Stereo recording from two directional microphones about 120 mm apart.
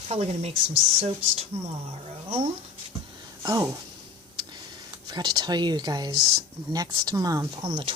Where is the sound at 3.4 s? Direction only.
25° right (ahead or behind).